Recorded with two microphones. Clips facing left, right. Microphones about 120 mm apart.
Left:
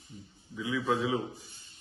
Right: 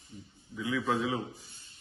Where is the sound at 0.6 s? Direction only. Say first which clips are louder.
Left 1 dB; 20° left (ahead or behind).